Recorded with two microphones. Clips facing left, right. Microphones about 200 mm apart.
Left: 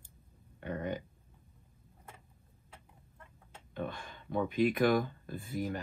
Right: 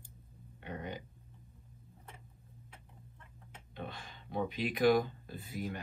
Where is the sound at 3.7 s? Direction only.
50° left (ahead or behind).